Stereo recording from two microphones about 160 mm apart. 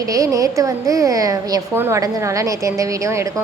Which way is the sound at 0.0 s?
20° right (ahead or behind).